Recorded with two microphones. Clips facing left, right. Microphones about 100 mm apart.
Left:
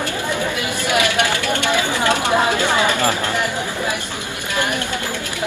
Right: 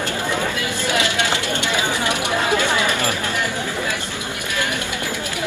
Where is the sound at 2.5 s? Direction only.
20° left (ahead or behind).